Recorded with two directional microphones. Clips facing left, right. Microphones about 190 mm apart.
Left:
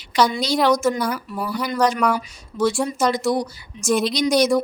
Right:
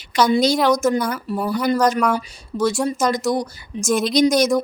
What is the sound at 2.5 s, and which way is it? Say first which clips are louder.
Speech: even; 35° right (ahead or behind).